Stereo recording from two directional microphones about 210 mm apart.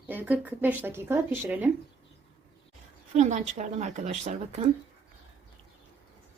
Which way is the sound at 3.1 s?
35° right (ahead or behind).